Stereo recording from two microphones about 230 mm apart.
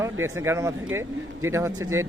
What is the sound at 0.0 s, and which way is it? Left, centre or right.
Speech, centre.